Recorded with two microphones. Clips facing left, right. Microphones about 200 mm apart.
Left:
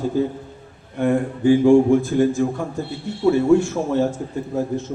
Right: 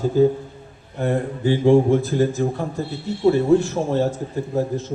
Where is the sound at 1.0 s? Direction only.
35° right (ahead or behind).